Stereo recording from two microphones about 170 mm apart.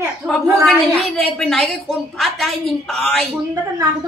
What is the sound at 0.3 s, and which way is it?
A woman's voice, 5° left (ahead or behind).